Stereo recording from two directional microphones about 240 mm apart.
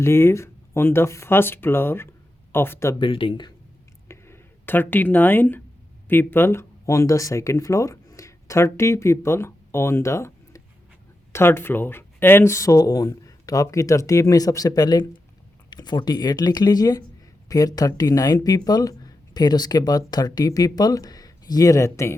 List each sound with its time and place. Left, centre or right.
0.0 s speech: centre
3.1 s speech: left
4.1 s a sound: centre
6.1 s speech: centre